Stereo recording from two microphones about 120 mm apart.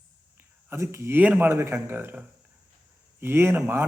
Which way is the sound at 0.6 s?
25° right (ahead or behind).